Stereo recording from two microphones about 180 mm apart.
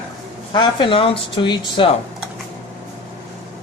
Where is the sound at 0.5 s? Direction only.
25° left (ahead or behind).